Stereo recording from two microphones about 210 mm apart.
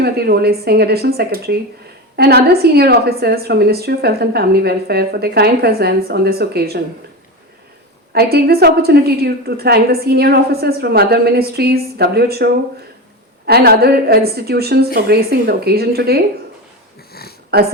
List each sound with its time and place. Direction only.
0.0 s a woman's voice: 50° right (ahead or behind)
8.1 s a woman's voice: 50° right (ahead or behind)
17.5 s a woman's voice: 50° right (ahead or behind)